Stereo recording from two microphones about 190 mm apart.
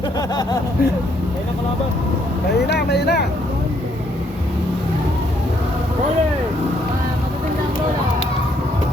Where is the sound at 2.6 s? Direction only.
60° left (ahead or behind).